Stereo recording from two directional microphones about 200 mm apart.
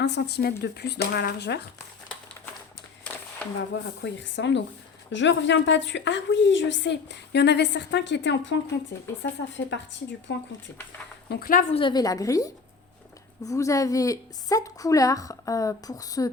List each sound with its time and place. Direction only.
0.0 s a woman's voice: 55° left (ahead or behind)
4.0 s a woman's voice: 60° left (ahead or behind)
11.3 s speech: 50° left (ahead or behind)
11.7 s a woman's voice: 25° left (ahead or behind)